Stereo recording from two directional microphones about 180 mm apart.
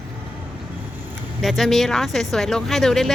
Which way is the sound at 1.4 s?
Centre (ahead or behind).